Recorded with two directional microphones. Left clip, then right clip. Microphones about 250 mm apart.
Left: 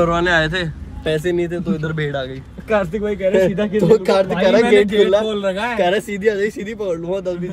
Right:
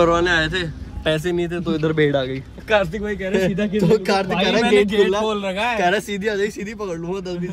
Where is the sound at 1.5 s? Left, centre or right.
Right.